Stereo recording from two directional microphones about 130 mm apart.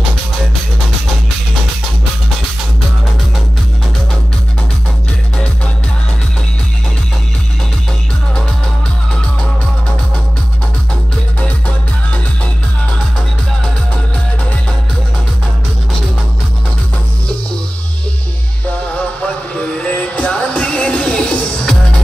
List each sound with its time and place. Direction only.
11.4 s music: 10° left (ahead or behind)
19.5 s music: 10° left (ahead or behind)